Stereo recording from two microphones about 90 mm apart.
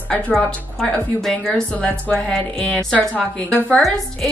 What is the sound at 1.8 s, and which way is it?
A woman's voice, 15° left (ahead or behind).